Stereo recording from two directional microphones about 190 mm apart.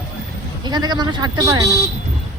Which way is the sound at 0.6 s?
20° right (ahead or behind).